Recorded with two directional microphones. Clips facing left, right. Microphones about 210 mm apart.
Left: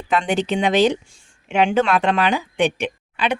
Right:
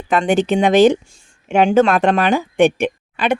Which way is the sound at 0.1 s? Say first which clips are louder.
Right 5 dB; 50° right (ahead or behind).